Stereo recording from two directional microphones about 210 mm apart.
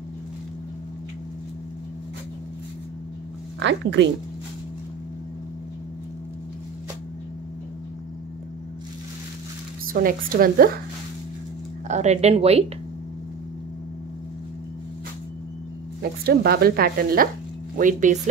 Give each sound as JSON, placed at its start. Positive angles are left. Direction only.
{"t": 3.5, "sound": "speech", "side_deg": -60}
{"t": 9.9, "sound": "speech", "side_deg": -45}
{"t": 11.9, "sound": "speech", "side_deg": -30}
{"t": 16.0, "sound": "speech", "side_deg": -45}